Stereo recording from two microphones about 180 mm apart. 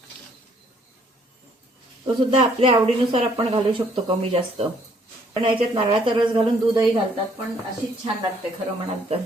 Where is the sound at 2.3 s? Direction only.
30° right (ahead or behind).